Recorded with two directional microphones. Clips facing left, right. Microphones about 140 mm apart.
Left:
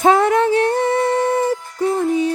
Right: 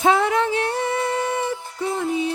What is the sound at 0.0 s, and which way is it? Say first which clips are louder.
Music: left 5 dB; 45° left (ahead or behind).